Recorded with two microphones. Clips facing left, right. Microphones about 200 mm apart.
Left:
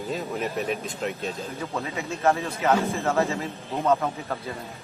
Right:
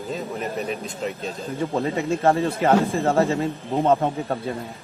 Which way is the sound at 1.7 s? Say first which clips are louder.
Right 10 dB; 35° right (ahead or behind).